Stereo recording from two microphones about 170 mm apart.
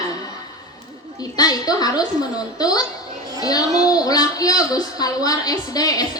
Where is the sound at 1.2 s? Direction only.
20° left (ahead or behind).